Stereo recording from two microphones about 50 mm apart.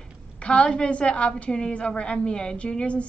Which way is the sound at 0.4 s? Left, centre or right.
Left.